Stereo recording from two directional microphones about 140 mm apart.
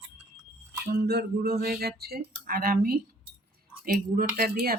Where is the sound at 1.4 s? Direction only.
90° right.